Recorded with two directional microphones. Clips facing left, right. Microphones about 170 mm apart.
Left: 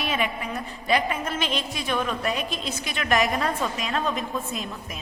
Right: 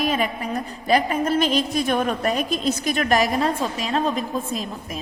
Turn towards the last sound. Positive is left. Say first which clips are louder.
# right 4 dB
turn(degrees=-35)  # may be behind; listen again after turning